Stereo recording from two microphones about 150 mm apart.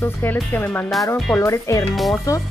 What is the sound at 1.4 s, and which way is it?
Speech, 20° left (ahead or behind).